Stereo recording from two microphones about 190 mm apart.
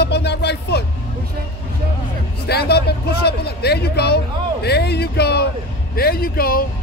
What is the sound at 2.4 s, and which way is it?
Speech, 55° left (ahead or behind).